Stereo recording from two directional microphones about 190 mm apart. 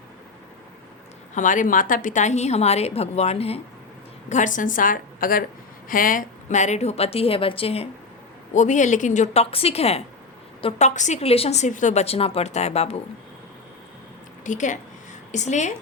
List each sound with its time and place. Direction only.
1.4 s a woman's voice: 40° left (ahead or behind)
14.4 s a woman's voice: 40° left (ahead or behind)